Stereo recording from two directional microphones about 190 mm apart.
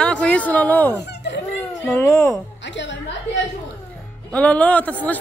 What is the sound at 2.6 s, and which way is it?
Speech, 70° left (ahead or behind).